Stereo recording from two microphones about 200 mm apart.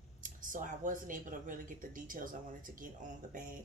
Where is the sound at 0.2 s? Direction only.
40° right (ahead or behind).